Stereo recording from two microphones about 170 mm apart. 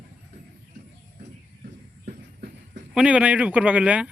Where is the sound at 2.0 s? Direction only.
55° right (ahead or behind).